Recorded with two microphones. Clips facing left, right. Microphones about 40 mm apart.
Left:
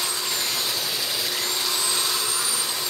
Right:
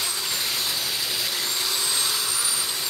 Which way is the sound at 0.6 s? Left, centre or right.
Centre.